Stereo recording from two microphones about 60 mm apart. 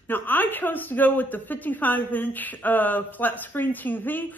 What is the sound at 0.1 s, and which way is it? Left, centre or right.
A woman's voice, left.